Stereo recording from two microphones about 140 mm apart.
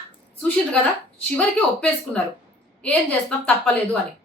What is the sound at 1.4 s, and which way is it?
A woman's voice, 10° left (ahead or behind).